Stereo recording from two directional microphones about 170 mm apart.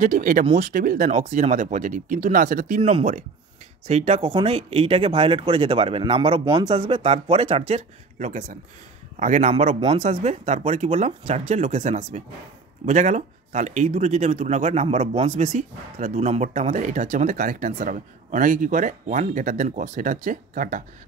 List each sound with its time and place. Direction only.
0.0 s speech: 50° right (ahead or behind)
2.8 s speech: 35° right (ahead or behind)